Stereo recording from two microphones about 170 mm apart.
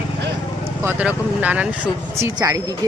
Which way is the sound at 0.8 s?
10° right (ahead or behind).